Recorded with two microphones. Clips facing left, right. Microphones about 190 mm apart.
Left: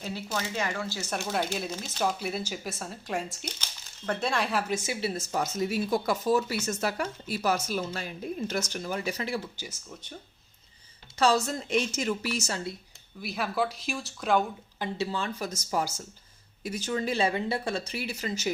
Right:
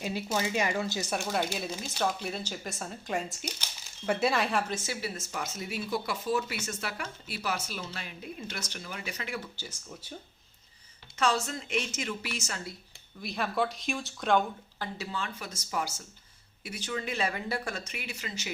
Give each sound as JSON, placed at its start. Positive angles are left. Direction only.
{"t": 0.0, "sound": "speech", "side_deg": -15}
{"t": 1.1, "sound": "speech", "side_deg": 0}
{"t": 2.1, "sound": "speech", "side_deg": 5}
{"t": 4.9, "sound": "speech", "side_deg": 30}
{"t": 11.2, "sound": "speech", "side_deg": 35}
{"t": 13.2, "sound": "speech", "side_deg": 5}
{"t": 14.8, "sound": "speech", "side_deg": 30}